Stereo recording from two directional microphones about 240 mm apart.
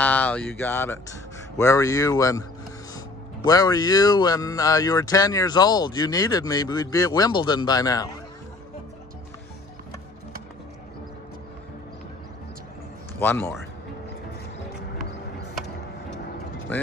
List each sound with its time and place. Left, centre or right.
0.0 s speech: centre
3.4 s speech: centre
13.2 s speech: centre